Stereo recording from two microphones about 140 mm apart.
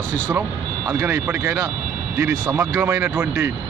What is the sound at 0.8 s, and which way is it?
Speech, 20° right (ahead or behind).